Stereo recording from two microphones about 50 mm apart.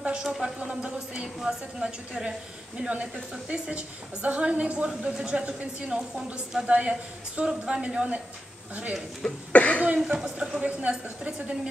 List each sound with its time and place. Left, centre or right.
0.0 s a sound: centre
0.6 s a woman's voice: centre
2.8 s a woman's voice: right
9.5 s cough: left
9.9 s a woman's voice: centre